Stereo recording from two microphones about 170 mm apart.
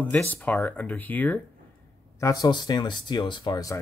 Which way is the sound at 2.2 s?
20° left (ahead or behind).